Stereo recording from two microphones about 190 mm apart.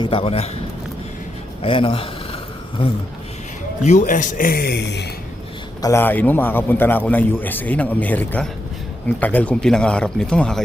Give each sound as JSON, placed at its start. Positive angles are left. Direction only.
{"t": 0.0, "sound": "a man's voice", "side_deg": 30}
{"t": 1.6, "sound": "speech", "side_deg": 30}
{"t": 3.8, "sound": "speech", "side_deg": 40}
{"t": 5.8, "sound": "a man's voice", "side_deg": 15}